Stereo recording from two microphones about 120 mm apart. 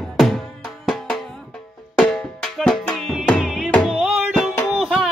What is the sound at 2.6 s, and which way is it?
Music, 5° left (ahead or behind).